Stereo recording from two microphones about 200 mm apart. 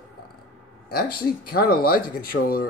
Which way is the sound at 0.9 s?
50° left (ahead or behind).